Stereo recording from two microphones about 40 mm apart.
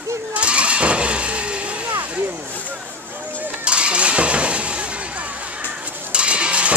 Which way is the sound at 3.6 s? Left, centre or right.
Right.